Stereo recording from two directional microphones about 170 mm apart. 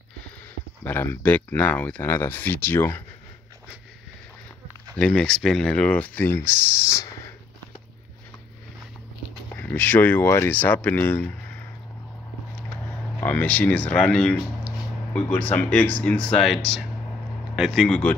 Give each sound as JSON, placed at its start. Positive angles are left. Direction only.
{"t": 0.8, "sound": "speech", "side_deg": 10}
{"t": 4.9, "sound": "speech", "side_deg": 5}
{"t": 6.9, "sound": "a sound", "side_deg": 15}
{"t": 9.6, "sound": "speech", "side_deg": 10}
{"t": 13.2, "sound": "speech", "side_deg": 10}